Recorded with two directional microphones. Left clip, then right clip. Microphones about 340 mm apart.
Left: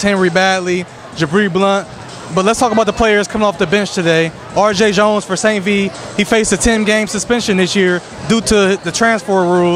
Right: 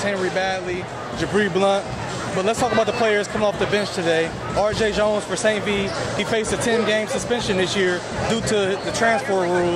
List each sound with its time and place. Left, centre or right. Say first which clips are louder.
0.0 s a man's voice: left 9 dB; left